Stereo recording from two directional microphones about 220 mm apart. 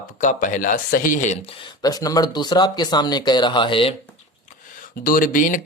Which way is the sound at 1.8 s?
15° left (ahead or behind).